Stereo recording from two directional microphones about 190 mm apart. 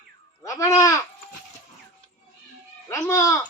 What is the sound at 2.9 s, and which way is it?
Speech, 15° left (ahead or behind).